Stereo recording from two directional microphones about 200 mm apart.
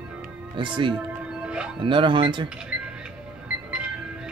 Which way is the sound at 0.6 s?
25° right (ahead or behind).